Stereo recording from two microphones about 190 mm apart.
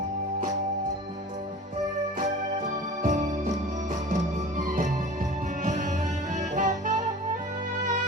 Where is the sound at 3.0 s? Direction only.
40° right (ahead or behind).